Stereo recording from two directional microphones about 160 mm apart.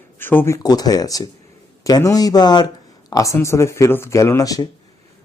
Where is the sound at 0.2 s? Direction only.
15° left (ahead or behind).